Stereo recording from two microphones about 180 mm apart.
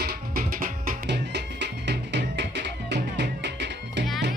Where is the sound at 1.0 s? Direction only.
70° right (ahead or behind).